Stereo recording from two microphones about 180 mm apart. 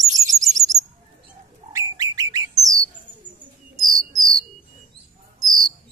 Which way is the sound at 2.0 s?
20° right (ahead or behind).